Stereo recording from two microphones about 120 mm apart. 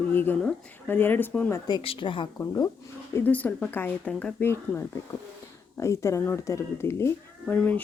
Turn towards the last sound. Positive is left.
turn(degrees=10)  # may be behind; listen again after turning